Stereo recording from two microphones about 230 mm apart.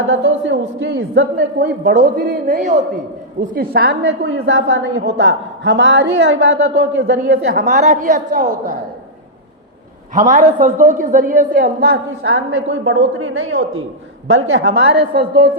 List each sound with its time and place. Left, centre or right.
0.1 s a woman's voice: right
10.2 s a man's voice: right
12.2 s a woman's voice: right